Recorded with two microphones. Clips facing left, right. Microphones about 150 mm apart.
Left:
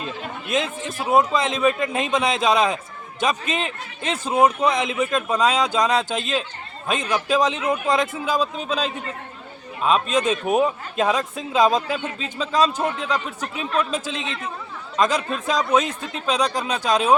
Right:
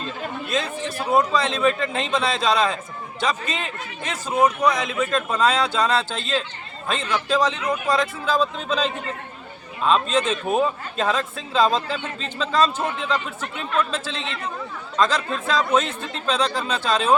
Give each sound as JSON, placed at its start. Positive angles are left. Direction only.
{"t": 0.0, "sound": "chatter", "side_deg": 20}
{"t": 0.9, "sound": "a man's voice", "side_deg": 20}